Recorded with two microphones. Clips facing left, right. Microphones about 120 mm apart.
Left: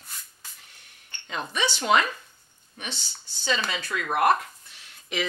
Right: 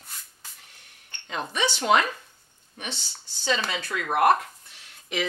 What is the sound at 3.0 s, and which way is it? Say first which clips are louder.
Speech: even; 55° right (ahead or behind).